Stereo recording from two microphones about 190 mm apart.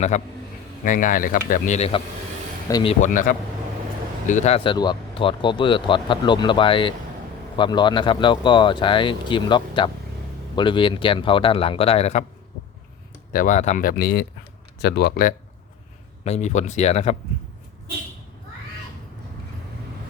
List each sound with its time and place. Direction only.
0.1 s speech: 40° left (ahead or behind)
2.6 s speech: 20° left (ahead or behind)
3.0 s speech: 45° left (ahead or behind)
4.3 s speech: 35° left (ahead or behind)
13.3 s speech: 40° left (ahead or behind)
13.9 s speech: 60° left (ahead or behind)
16.2 s speech: 35° left (ahead or behind)